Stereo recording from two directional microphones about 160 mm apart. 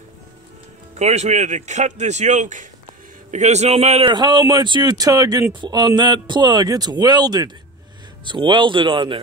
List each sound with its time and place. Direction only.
0.9 s speech: 45° right (ahead or behind)
4.1 s a man's voice: 30° right (ahead or behind)